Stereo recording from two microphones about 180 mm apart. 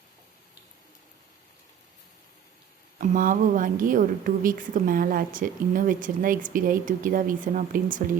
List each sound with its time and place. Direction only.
3.0 s a woman's voice: 50° right (ahead or behind)